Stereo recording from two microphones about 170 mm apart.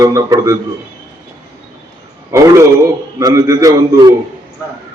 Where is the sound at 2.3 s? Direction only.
20° right (ahead or behind).